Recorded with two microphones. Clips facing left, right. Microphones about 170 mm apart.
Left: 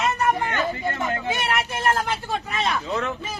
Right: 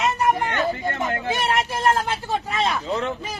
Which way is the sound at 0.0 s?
15° right (ahead or behind).